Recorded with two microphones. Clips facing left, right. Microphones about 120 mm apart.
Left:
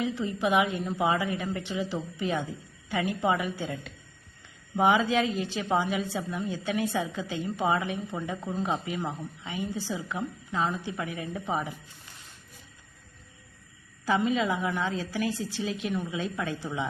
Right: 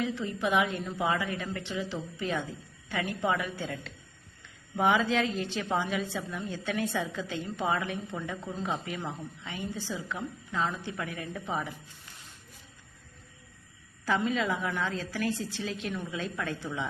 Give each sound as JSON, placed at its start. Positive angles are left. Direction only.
{"t": 0.0, "sound": "a woman's voice", "side_deg": 15}
{"t": 14.0, "sound": "a woman's voice", "side_deg": 15}